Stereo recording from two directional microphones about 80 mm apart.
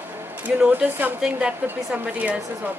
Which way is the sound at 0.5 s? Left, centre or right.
Centre.